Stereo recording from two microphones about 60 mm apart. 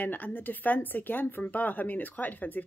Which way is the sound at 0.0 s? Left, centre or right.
Left.